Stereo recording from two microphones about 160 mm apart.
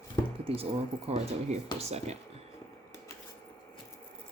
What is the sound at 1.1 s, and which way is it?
Speech, 40° right (ahead or behind).